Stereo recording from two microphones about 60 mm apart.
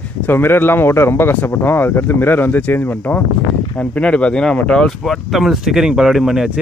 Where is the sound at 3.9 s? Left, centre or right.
Left.